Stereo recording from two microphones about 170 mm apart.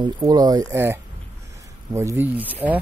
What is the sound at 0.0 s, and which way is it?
Speech, 25° right (ahead or behind).